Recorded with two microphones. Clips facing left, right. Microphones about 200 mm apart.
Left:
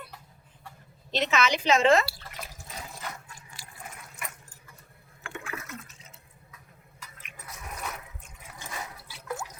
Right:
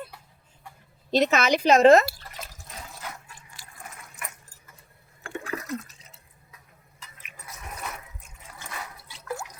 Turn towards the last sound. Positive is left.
turn(degrees=-5)  # may be behind; listen again after turning